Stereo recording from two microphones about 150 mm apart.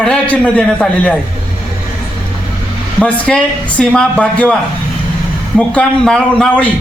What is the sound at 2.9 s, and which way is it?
Speech, 5° left (ahead or behind).